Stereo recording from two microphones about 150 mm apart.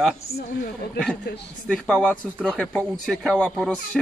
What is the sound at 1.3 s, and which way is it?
Speech, 90° left.